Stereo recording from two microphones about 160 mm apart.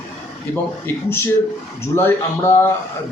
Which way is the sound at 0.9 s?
15° left (ahead or behind).